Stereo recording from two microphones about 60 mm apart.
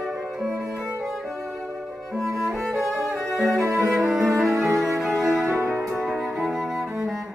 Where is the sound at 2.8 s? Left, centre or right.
Right.